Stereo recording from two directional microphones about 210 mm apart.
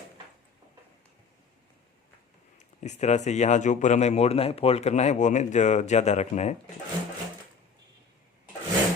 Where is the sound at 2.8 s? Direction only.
35° left (ahead or behind).